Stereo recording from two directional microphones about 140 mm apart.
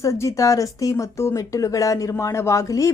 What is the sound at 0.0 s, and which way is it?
Speech, 20° left (ahead or behind).